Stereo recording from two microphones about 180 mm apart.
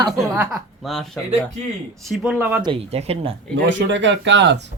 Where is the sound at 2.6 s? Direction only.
30° right (ahead or behind).